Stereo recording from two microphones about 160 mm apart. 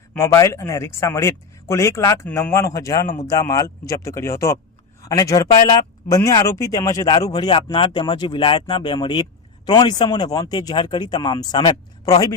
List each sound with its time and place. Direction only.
0.1 s speech: 15° left (ahead or behind)